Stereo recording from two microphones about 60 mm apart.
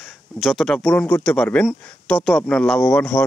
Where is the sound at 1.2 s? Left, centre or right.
Left.